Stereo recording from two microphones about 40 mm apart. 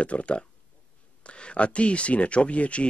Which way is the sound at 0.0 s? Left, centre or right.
Left.